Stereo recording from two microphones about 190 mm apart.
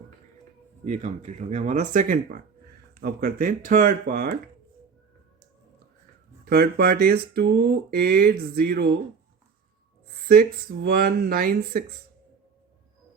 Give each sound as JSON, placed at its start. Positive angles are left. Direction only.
{"t": 0.9, "sound": "speech", "side_deg": -40}
{"t": 6.4, "sound": "speech", "side_deg": -50}
{"t": 10.2, "sound": "speech", "side_deg": -55}